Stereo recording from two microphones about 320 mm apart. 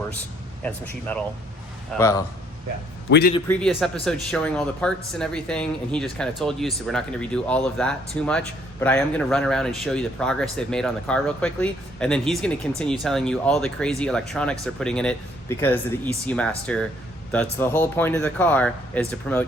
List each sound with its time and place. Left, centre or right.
0.6 s speech: centre
3.1 s a man's voice: left
3.3 s speech: centre